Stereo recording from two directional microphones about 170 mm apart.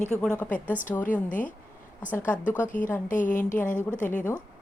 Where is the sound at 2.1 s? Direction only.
10° left (ahead or behind).